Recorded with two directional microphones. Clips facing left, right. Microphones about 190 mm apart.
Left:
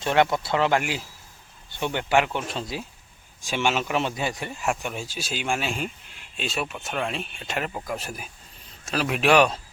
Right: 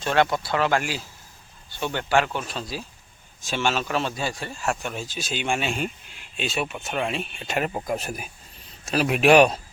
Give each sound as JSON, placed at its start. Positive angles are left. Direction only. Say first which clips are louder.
{"t": 0.0, "sound": "a man's voice", "louder": "even", "side_deg": 20}
{"t": 7.7, "sound": "speech", "louder": "right 4 dB", "side_deg": -25}